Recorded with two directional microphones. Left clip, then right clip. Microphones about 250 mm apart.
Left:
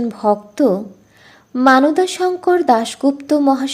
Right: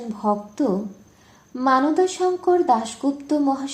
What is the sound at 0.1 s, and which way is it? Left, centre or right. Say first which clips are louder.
Speech: left 4 dB; left.